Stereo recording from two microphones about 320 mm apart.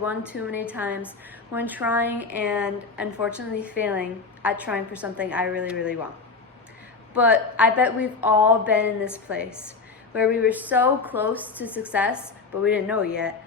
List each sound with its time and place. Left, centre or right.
0.3 s a woman's voice: centre
7.1 s a woman's voice: centre